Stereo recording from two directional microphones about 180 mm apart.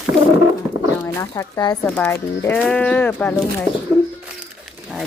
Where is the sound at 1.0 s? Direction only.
15° left (ahead or behind).